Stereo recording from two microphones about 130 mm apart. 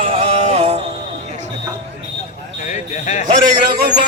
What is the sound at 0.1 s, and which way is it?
Synthetic singing, 50° right (ahead or behind).